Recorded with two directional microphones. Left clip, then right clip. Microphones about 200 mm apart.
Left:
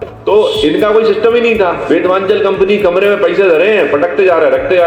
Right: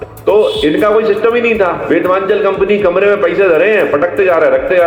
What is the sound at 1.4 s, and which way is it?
Speech, 50° left (ahead or behind).